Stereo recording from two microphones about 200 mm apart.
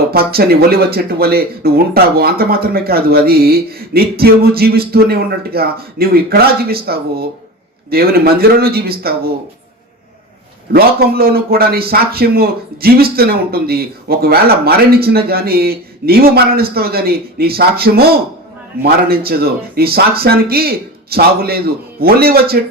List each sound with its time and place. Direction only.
0.1 s a man's voice: 50° right (ahead or behind)
10.7 s a man's voice: 50° right (ahead or behind)